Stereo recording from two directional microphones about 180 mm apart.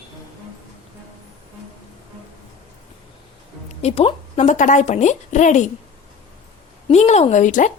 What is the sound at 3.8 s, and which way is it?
Speech, 35° left (ahead or behind).